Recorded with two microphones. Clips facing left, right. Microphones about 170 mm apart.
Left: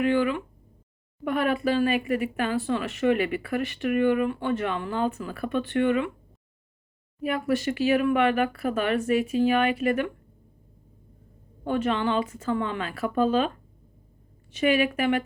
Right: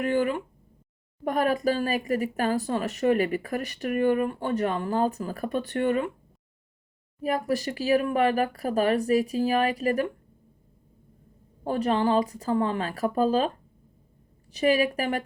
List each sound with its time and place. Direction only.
0.0 s speech: 40° right (ahead or behind)
7.2 s speech: 35° right (ahead or behind)
11.6 s speech: 35° right (ahead or behind)
14.5 s speech: 35° right (ahead or behind)